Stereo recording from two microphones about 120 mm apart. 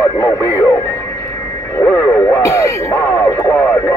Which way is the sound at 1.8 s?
20° left (ahead or behind).